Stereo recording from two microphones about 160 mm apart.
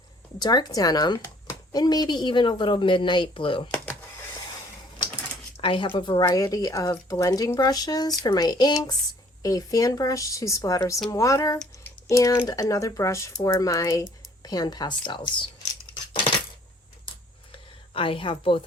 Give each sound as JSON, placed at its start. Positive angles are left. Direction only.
{"t": 0.3, "sound": "speech", "side_deg": 25}
{"t": 5.5, "sound": "speech", "side_deg": 35}
{"t": 17.5, "sound": "a sound", "side_deg": 35}